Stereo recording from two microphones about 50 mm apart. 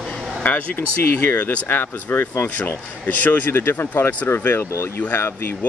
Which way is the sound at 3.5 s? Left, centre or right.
Left.